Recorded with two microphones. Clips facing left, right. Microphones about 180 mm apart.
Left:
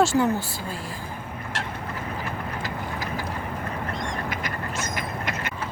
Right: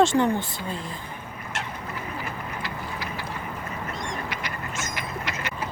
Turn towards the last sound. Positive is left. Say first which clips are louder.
# left 3 dB
turn(degrees=40)  # may be behind; listen again after turning